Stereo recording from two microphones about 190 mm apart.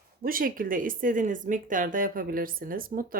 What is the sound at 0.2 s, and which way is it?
Speech, 50° right (ahead or behind).